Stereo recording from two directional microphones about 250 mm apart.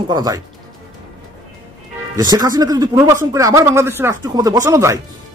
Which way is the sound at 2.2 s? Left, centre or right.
Centre.